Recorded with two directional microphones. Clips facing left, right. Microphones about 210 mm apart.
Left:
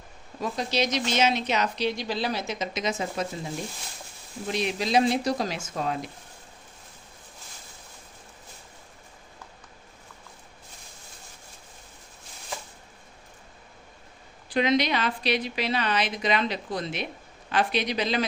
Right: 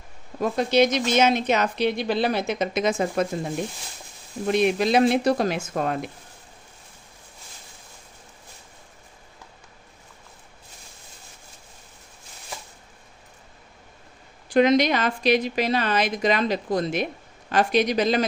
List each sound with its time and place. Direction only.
0.3 s speech: 55° right (ahead or behind)
14.5 s a woman's voice: 45° right (ahead or behind)